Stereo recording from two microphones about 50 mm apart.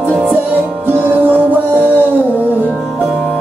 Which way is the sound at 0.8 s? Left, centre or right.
Right.